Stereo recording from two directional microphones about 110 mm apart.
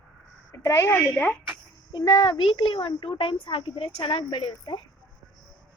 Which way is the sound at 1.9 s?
40° left (ahead or behind).